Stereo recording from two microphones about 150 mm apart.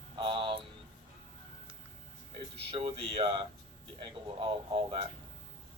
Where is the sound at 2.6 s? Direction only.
40° right (ahead or behind).